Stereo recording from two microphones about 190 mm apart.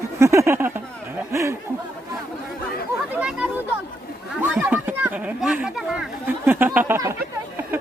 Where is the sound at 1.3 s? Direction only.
15° right (ahead or behind).